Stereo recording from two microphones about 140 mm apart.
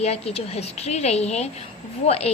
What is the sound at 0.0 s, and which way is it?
A woman's voice, 45° left (ahead or behind).